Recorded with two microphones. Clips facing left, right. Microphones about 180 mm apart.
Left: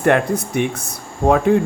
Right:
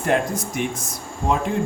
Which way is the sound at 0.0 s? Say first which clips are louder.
Left 5 dB; 65° left (ahead or behind).